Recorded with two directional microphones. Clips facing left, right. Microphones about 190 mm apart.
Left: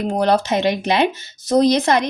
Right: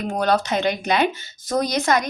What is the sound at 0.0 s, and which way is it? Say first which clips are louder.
Speech: left 3 dB; 30° left (ahead or behind).